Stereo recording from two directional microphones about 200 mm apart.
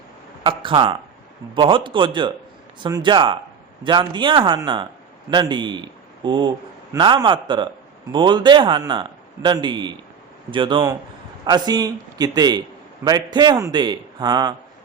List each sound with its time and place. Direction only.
0.4 s a man's voice: 25° right (ahead or behind)